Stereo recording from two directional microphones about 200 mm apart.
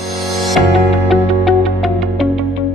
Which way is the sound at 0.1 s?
Centre (ahead or behind).